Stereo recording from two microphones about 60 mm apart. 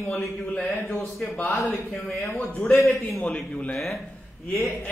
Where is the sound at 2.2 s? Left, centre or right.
Left.